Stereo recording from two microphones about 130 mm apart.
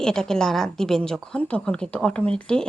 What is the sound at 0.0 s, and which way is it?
Speech, 5° left (ahead or behind).